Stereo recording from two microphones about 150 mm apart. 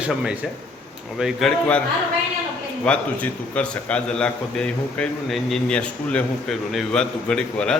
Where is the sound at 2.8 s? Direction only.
10° left (ahead or behind).